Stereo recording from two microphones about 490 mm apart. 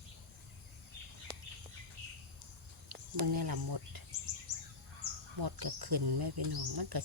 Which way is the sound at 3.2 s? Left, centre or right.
Right.